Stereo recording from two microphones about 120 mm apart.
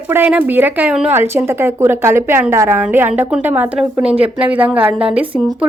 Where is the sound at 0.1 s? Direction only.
15° right (ahead or behind).